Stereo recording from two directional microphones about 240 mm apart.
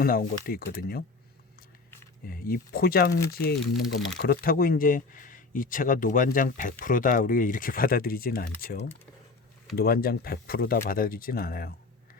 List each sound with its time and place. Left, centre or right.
0.0 s speech: left
2.2 s speech: left